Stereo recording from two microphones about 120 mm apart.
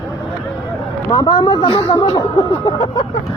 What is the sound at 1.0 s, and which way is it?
Speech, 30° left (ahead or behind).